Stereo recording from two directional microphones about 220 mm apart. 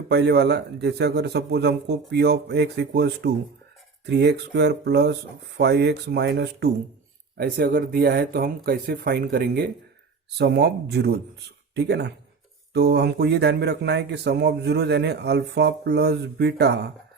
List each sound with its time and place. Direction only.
0.1 s speech: 50° right (ahead or behind)